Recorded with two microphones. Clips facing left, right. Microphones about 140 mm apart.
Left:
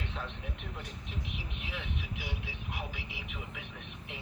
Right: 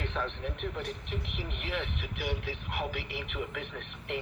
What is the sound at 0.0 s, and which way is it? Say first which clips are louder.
Speech: right 6 dB; 65° right (ahead or behind).